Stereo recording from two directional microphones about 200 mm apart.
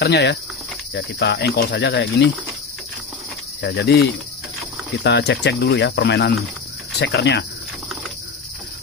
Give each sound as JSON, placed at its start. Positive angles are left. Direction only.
{"t": 0.0, "sound": "speech", "side_deg": 60}
{"t": 3.6, "sound": "speech", "side_deg": 60}